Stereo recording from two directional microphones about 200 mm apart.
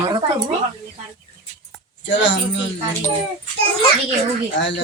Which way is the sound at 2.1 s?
60° left (ahead or behind).